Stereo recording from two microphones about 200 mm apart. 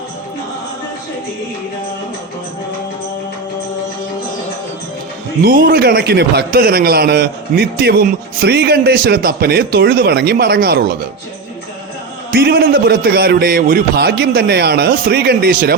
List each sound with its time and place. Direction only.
5.4 s a man's voice: 45° right (ahead or behind)
12.3 s a man's voice: 50° right (ahead or behind)